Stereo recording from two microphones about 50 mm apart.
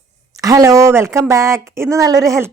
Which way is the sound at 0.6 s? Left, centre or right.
Right.